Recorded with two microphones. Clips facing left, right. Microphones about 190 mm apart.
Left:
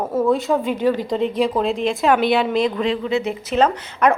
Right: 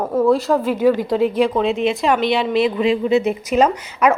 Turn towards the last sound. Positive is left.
turn(degrees=-10)  # may be behind; listen again after turning